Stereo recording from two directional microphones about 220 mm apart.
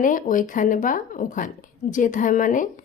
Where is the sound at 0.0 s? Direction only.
35° left (ahead or behind).